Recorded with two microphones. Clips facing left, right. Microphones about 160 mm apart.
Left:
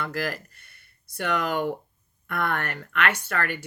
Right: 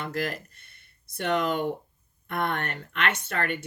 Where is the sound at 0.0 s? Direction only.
30° right (ahead or behind).